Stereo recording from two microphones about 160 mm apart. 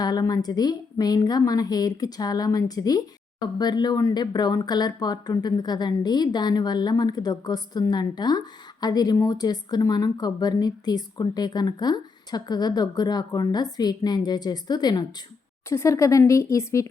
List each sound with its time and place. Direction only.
0.0 s speech: 25° left (ahead or behind)